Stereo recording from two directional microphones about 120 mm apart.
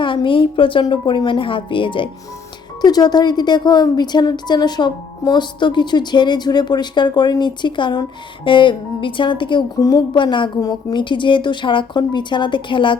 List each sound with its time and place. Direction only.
0.0 s a woman's voice: 45° left (ahead or behind)
2.8 s a woman's voice: 35° left (ahead or behind)